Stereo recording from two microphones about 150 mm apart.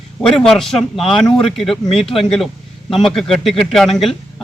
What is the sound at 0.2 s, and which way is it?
Speech, 5° left (ahead or behind).